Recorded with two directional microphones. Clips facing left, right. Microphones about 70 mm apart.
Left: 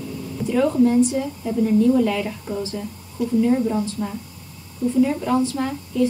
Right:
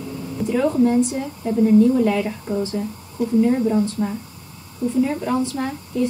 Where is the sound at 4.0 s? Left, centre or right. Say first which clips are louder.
Right 3 dB; right.